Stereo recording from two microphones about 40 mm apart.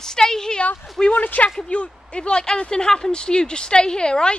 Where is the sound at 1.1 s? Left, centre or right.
Left.